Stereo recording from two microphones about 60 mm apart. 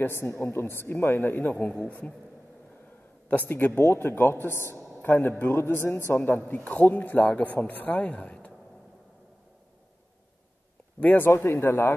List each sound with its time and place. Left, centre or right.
0.2 s speech: left
1.5 s a man's voice: centre
3.3 s a man's voice: left
8.2 s a sound: centre
11.0 s speech: left